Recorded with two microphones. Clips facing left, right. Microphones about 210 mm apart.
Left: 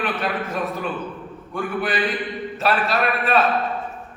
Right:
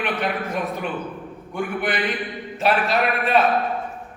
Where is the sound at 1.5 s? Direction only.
15° right (ahead or behind).